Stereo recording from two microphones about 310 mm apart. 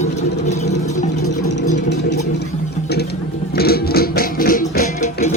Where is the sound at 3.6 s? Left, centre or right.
Left.